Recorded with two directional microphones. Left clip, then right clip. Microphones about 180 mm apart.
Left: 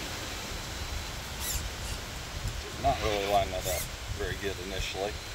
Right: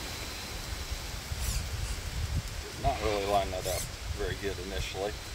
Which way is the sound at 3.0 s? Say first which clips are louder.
Right 2 dB; 5° right (ahead or behind).